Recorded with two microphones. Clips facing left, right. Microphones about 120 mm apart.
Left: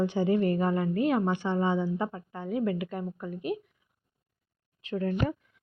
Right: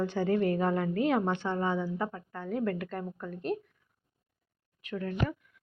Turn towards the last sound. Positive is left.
turn(degrees=35)  # may be behind; listen again after turning